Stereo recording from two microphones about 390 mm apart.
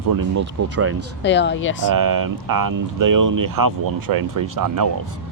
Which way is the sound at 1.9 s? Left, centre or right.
Right.